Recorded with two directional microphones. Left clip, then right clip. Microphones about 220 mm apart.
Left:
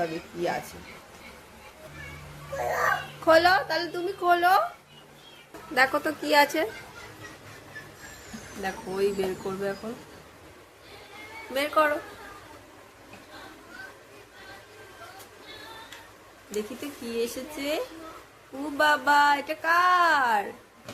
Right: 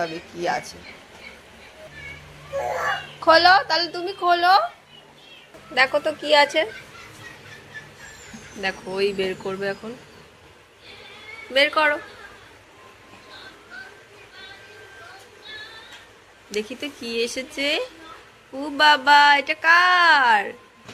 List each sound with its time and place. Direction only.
0.0 s a woman's voice: 5° left (ahead or behind)
3.2 s a woman's voice: 10° left (ahead or behind)
5.7 s a woman's voice: 15° left (ahead or behind)
8.6 s speech: centre (ahead or behind)
11.5 s speech: centre (ahead or behind)
16.5 s speech: 10° right (ahead or behind)